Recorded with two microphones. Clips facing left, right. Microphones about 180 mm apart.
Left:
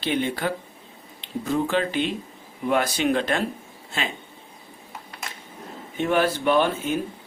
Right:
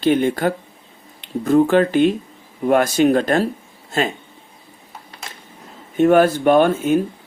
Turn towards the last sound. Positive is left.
turn(degrees=-50)  # may be behind; listen again after turning